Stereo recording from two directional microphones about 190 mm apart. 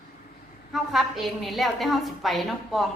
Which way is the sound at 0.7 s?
Centre (ahead or behind).